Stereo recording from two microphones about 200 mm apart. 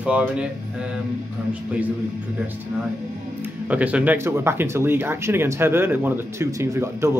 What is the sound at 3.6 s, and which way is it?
Speech, 5° right (ahead or behind).